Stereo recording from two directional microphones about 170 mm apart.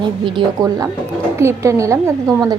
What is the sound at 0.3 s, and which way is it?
A woman's voice, 25° right (ahead or behind).